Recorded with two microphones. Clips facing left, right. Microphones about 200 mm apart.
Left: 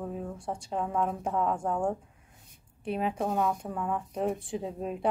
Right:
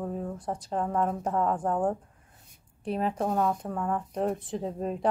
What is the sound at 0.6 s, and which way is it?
A woman's voice, centre (ahead or behind).